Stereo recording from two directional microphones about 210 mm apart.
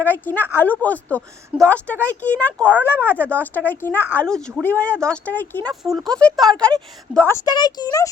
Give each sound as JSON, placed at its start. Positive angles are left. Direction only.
{"t": 0.0, "sound": "a woman's voice", "side_deg": 10}